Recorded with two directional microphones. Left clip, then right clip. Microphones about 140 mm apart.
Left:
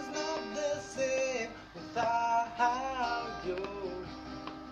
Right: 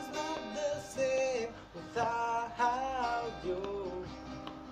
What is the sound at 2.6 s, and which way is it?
Music, 20° right (ahead or behind).